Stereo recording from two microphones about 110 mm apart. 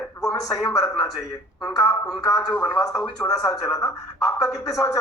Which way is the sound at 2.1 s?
30° left (ahead or behind).